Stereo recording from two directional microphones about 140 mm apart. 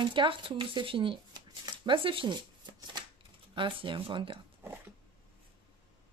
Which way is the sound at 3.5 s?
35° right (ahead or behind).